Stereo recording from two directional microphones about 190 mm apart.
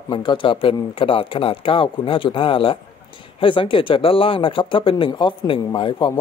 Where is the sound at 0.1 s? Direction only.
25° left (ahead or behind).